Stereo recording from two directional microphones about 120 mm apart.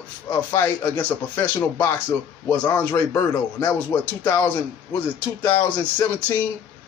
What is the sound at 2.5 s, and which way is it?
A man's voice, 15° left (ahead or behind).